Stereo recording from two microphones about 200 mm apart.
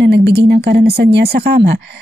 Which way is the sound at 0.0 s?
55° right (ahead or behind).